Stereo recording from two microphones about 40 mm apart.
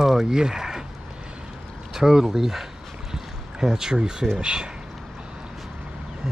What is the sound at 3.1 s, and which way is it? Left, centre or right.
Boat, centre.